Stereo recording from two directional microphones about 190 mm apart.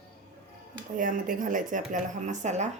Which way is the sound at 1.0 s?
45° right (ahead or behind).